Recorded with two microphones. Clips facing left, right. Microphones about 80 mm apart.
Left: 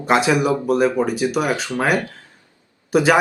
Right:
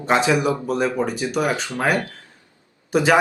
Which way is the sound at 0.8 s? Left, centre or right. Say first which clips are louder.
Left 4 dB; centre.